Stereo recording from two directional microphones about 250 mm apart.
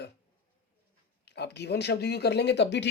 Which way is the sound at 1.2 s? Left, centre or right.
Left.